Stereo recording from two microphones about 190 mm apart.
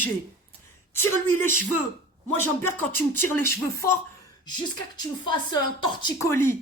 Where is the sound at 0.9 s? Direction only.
15° left (ahead or behind).